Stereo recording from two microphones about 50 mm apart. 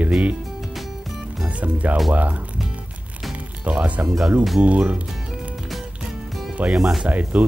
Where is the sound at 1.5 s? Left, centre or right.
Right.